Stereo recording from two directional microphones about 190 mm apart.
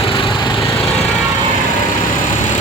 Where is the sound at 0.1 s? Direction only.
25° left (ahead or behind).